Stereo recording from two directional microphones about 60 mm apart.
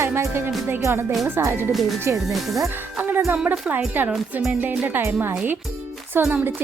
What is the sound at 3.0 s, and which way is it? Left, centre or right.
Speech, right.